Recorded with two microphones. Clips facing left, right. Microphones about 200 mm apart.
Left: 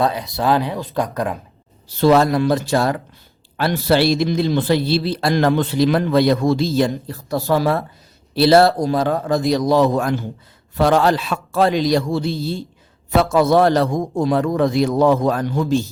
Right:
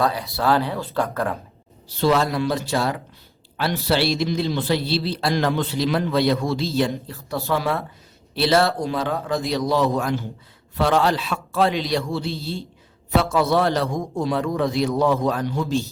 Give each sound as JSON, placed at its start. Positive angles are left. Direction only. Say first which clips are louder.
{"t": 0.0, "sound": "speech", "louder": "left 3 dB", "side_deg": 20}
{"t": 2.0, "sound": "a man's voice", "louder": "left 6 dB", "side_deg": 50}